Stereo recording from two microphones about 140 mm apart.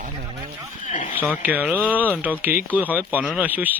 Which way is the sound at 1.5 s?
10° right (ahead or behind).